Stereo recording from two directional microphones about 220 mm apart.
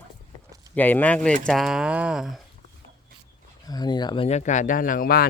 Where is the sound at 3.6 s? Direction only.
20° left (ahead or behind); by 5.3 s 40° left (ahead or behind).